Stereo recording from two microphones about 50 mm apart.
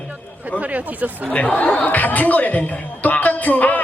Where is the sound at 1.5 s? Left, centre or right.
Left.